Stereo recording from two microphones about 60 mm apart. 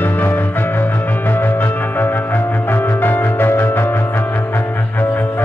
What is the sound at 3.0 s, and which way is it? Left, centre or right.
Music, left.